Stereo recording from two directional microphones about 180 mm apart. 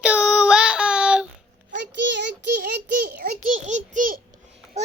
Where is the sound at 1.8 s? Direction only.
75° right (ahead or behind).